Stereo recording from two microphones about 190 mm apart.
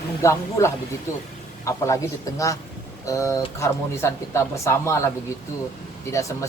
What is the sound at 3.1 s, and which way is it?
Speech, 15° left (ahead or behind).